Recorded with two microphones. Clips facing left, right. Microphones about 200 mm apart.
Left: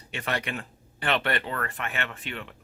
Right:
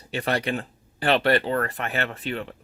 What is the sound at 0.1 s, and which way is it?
Speech, 35° right (ahead or behind).